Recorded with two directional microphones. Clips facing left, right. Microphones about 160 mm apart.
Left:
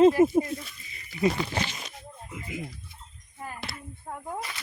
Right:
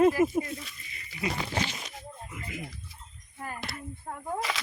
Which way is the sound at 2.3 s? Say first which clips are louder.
Left 5 dB; 20° left (ahead or behind).